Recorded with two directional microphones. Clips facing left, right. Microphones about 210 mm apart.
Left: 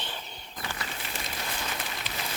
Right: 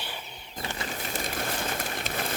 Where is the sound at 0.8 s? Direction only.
45° right (ahead or behind).